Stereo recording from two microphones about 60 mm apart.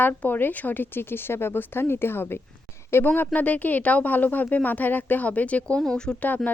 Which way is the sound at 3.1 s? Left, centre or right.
Left.